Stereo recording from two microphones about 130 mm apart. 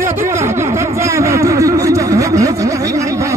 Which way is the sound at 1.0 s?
25° right (ahead or behind).